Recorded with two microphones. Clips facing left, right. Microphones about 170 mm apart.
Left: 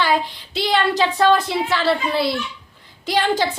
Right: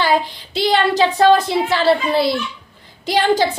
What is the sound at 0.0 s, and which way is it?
A woman's voice, 35° right (ahead or behind).